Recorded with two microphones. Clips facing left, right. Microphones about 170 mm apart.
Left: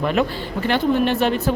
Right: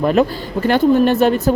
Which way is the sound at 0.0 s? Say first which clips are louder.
Right 5 dB; 40° right (ahead or behind).